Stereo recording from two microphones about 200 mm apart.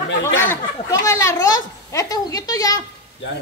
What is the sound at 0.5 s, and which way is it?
Speech, 15° left (ahead or behind).